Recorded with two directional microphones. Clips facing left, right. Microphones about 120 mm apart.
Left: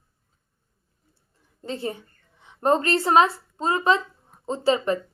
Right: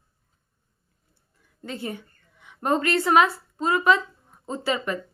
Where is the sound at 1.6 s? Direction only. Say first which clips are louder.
Left 3 dB; 30° left (ahead or behind).